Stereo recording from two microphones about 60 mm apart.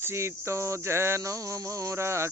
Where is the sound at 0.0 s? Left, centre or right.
Right.